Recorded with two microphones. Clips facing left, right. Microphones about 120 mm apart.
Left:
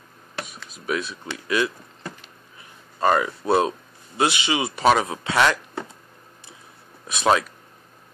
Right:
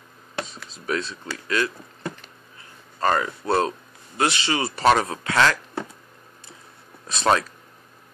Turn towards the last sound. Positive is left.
turn(degrees=10)  # may be behind; listen again after turning